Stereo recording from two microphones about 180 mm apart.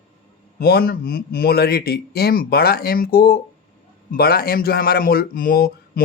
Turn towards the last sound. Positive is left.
turn(degrees=55)  # may be behind; listen again after turning